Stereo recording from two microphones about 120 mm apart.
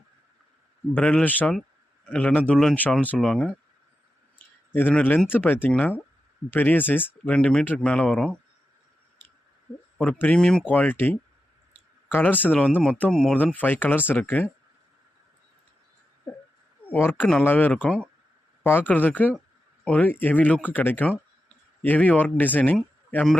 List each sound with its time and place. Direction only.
0.9 s speech: 10° left (ahead or behind)
4.7 s speech: 15° left (ahead or behind)
10.0 s speech: 10° left (ahead or behind)
16.9 s speech: 15° left (ahead or behind)